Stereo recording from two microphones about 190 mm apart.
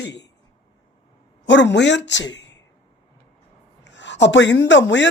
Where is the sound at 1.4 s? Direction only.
70° left (ahead or behind).